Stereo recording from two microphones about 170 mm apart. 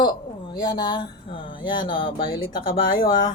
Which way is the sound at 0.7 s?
30° left (ahead or behind).